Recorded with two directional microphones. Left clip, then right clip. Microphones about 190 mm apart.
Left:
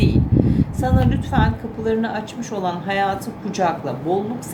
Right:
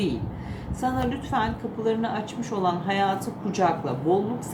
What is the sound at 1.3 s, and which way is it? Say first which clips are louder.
A woman's voice: left 4 dB; 25° left (ahead or behind).